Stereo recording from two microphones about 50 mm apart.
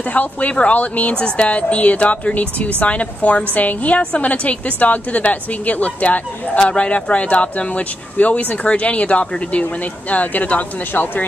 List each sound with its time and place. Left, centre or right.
0.1 s speech: left